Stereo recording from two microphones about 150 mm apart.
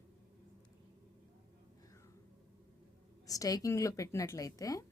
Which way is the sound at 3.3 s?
25° left (ahead or behind).